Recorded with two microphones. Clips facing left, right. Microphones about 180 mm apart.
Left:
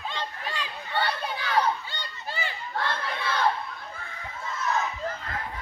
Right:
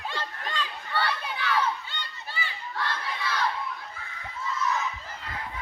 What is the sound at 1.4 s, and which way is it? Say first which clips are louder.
Children playing: left 2 dB; 40° left (ahead or behind).